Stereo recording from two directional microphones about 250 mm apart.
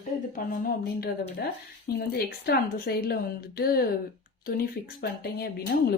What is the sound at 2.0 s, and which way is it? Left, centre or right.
A woman's voice, left.